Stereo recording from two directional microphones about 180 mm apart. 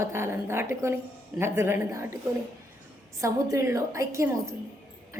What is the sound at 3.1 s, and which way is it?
A woman's voice, 15° right (ahead or behind).